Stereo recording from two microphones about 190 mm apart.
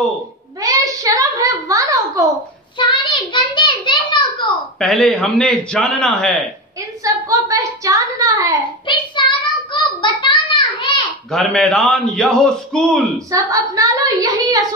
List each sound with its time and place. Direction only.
0.6 s a sound: 15° right (ahead or behind)
2.8 s a sound: 25° left (ahead or behind)
4.7 s a man's voice: centre (ahead or behind)
7.0 s a woman's voice: 15° right (ahead or behind)
8.8 s child singing: 25° left (ahead or behind)
11.3 s a man's voice: centre (ahead or behind)
13.3 s a woman's voice: 15° right (ahead or behind)